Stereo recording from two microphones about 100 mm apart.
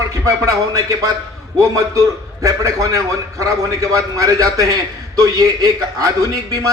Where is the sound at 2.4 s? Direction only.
35° right (ahead or behind).